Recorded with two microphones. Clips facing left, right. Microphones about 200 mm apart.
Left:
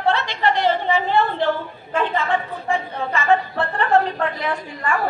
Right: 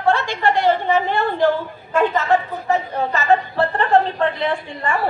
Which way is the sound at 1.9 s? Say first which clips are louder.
Right 4 dB; 45° right (ahead or behind).